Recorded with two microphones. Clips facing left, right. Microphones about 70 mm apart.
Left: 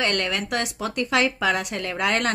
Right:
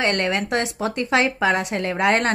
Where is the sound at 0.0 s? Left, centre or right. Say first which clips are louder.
Right 3 dB; right.